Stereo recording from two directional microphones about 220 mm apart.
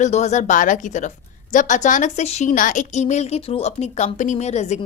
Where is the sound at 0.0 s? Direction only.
30° left (ahead or behind).